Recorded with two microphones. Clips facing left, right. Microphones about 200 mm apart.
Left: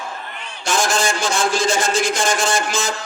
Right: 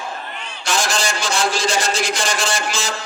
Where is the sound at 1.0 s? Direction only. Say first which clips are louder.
Left 2 dB; 50° left (ahead or behind).